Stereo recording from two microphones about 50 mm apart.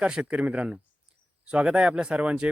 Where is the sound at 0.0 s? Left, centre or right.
Right.